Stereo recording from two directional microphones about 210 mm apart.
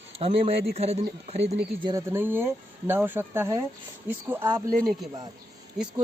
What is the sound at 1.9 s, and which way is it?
A man's voice, 10° right (ahead or behind).